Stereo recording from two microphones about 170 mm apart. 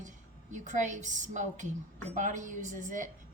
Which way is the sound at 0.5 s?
45° right (ahead or behind).